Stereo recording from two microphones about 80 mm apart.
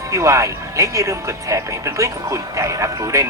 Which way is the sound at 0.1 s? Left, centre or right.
Right.